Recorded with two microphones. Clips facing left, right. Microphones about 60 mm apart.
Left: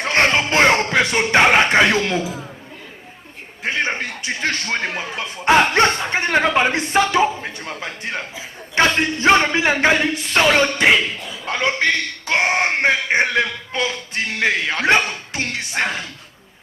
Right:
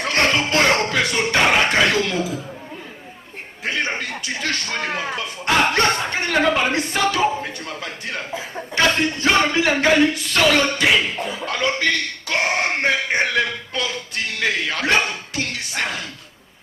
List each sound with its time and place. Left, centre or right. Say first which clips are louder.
0.0 s music: left 2 dB; left
3.6 s a man's voice: left 2 dB; left